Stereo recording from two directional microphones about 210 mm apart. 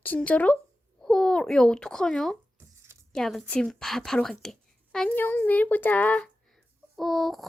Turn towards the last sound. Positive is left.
turn(degrees=0)  # may be behind; listen again after turning